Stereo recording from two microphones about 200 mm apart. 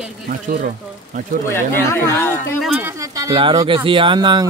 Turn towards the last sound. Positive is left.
turn(degrees=-20)  # may be behind; listen again after turning